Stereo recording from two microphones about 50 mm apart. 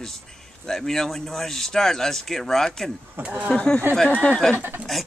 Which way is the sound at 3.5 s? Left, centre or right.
Centre.